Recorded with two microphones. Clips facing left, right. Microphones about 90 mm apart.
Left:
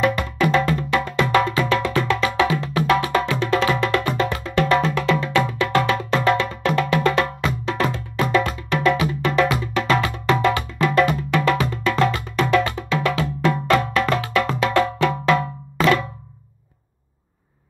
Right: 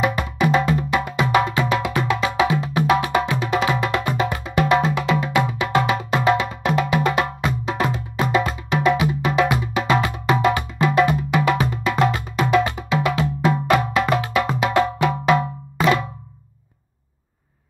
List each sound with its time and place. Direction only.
0.0 s music: 15° right (ahead or behind)